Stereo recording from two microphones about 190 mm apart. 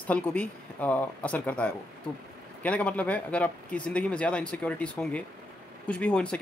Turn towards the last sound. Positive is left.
turn(degrees=5)  # may be behind; listen again after turning